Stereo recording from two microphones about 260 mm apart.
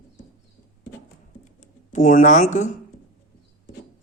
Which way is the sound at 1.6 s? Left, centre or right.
Left.